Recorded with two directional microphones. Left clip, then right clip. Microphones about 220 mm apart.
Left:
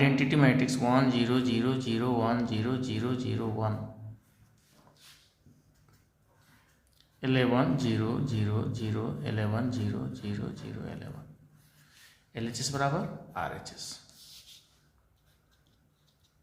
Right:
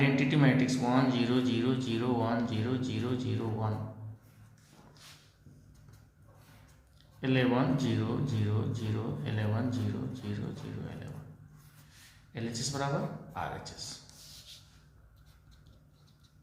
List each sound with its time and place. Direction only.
0.0 s a man's voice: 35° left (ahead or behind)
7.2 s a man's voice: 35° left (ahead or behind)
12.3 s a man's voice: 35° left (ahead or behind)